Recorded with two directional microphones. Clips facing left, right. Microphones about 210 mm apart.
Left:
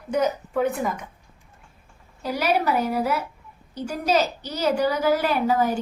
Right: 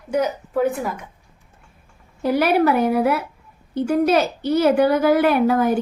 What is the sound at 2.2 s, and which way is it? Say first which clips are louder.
A woman's voice: right 7 dB; 60° right (ahead or behind).